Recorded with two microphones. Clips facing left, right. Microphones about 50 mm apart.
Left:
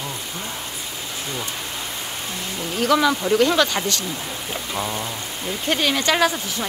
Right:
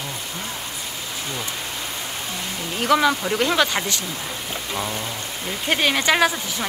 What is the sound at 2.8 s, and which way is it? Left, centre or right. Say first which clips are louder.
Speech: even; centre.